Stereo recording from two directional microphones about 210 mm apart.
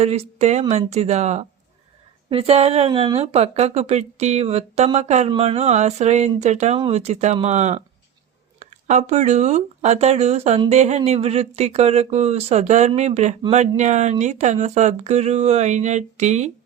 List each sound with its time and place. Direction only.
0.0 s a woman's voice: 30° right (ahead or behind)